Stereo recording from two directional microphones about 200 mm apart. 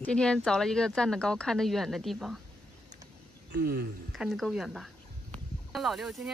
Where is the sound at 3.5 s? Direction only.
50° right (ahead or behind).